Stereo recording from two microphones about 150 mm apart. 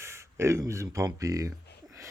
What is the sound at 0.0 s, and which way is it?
Speech, 20° right (ahead or behind).